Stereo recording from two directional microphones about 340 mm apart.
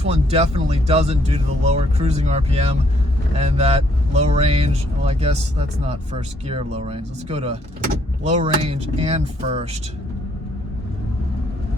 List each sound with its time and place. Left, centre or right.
0.0 s speech: centre